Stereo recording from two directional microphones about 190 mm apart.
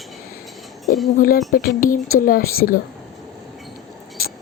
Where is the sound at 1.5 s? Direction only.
50° left (ahead or behind).